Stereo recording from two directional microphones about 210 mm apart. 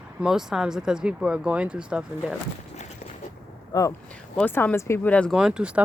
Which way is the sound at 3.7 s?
15° left (ahead or behind).